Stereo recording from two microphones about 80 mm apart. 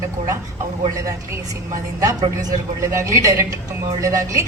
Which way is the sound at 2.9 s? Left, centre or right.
Right.